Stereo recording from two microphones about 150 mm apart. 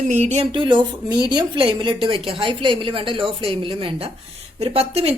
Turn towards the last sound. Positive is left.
turn(degrees=-40)  # may be behind; listen again after turning